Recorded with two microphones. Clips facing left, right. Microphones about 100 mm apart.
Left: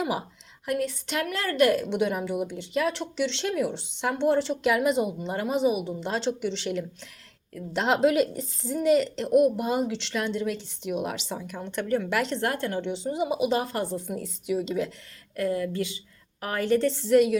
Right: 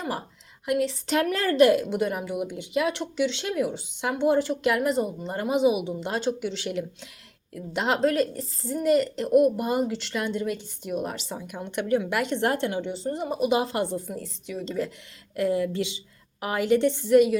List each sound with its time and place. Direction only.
0.0 s a woman's voice: 5° left (ahead or behind)
0.6 s speech: 15° right (ahead or behind)
1.0 s a woman's voice: 40° right (ahead or behind)
1.5 s speech: 25° right (ahead or behind)
1.8 s a woman's voice: 5° right (ahead or behind)
5.5 s a woman's voice: 15° right (ahead or behind)
12.4 s speech: 25° right (ahead or behind)
12.7 s a woman's voice: 5° right (ahead or behind)
13.5 s speech: 20° right (ahead or behind)
13.9 s a woman's voice: centre (ahead or behind)
14.4 s speech: 10° left (ahead or behind)
15.4 s a woman's voice: 20° right (ahead or behind)